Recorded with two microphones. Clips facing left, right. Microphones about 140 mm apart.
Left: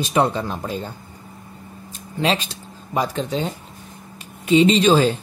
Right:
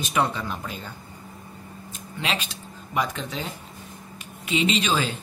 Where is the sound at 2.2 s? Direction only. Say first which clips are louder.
Left 8 dB; 35° left (ahead or behind).